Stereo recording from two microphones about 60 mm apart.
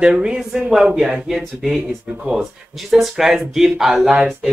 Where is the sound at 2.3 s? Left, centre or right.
Centre.